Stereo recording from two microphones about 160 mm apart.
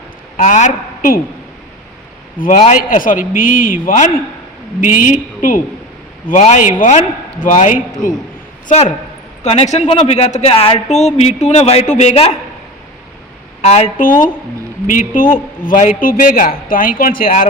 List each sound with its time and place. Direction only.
0.3 s a woman's voice: 50° left (ahead or behind)
2.4 s a man's voice: 50° left (ahead or behind)
8.6 s a man's voice: 40° left (ahead or behind)
13.7 s a man's voice: 45° left (ahead or behind)
14.8 s a man's voice: 55° left (ahead or behind)